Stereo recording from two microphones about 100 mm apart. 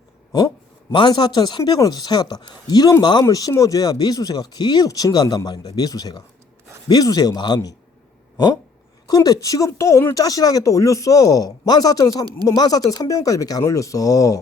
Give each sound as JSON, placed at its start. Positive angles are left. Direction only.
{"t": 0.3, "sound": "speech", "side_deg": 40}
{"t": 9.0, "sound": "speech", "side_deg": 40}
{"t": 10.2, "sound": "speech", "side_deg": 35}